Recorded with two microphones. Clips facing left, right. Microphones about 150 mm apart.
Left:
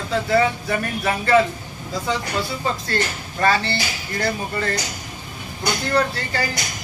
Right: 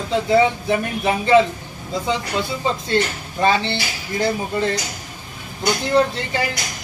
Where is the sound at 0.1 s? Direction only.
20° right (ahead or behind).